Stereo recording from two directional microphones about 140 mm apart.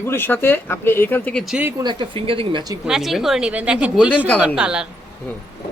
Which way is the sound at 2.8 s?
Centre (ahead or behind).